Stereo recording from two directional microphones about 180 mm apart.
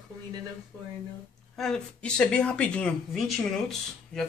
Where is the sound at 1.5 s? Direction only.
5° left (ahead or behind).